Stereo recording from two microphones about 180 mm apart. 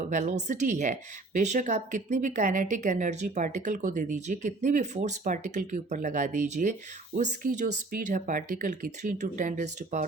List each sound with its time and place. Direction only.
0.1 s speech: 45° right (ahead or behind)